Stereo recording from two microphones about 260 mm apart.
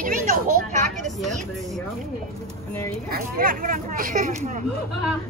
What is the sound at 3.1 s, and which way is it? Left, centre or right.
Speech, right.